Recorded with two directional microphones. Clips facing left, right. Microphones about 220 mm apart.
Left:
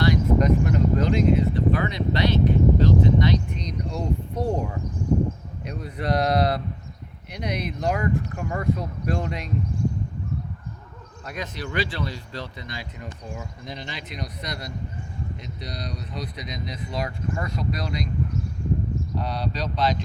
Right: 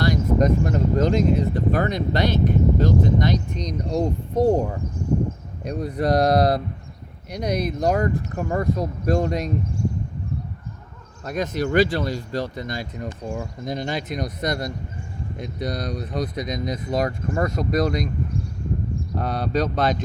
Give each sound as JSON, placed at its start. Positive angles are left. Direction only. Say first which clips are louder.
{"t": 0.0, "sound": "speech", "louder": "right 1 dB", "side_deg": -40}
{"t": 5.6, "sound": "speech", "louder": "right 6 dB", "side_deg": -40}
{"t": 11.3, "sound": "speech", "louder": "right 9 dB", "side_deg": -45}
{"t": 19.1, "sound": "speech", "louder": "right 9 dB", "side_deg": -50}